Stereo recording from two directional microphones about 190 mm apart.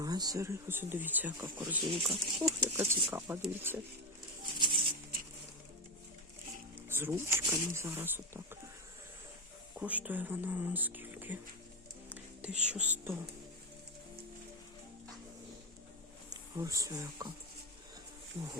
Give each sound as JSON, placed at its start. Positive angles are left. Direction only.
{"t": 0.0, "sound": "speech", "side_deg": -20}
{"t": 6.8, "sound": "speech", "side_deg": -10}
{"t": 9.7, "sound": "speech", "side_deg": -5}
{"t": 12.0, "sound": "music", "side_deg": -10}
{"t": 16.3, "sound": "speech", "side_deg": -15}